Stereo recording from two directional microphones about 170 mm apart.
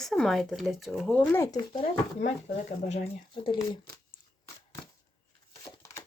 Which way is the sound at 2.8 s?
40° left (ahead or behind).